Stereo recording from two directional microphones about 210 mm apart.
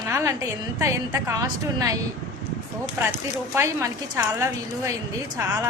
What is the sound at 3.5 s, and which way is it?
Speech, 10° right (ahead or behind).